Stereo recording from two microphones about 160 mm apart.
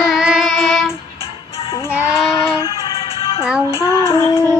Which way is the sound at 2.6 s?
35° left (ahead or behind).